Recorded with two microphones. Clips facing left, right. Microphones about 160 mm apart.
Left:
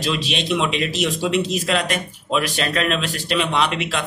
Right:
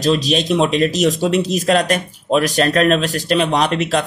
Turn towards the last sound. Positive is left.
turn(degrees=-40)  # may be behind; listen again after turning